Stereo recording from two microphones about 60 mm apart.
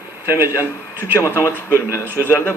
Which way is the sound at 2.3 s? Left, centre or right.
Left.